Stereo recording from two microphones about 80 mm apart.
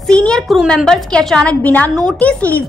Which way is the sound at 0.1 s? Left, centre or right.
Centre.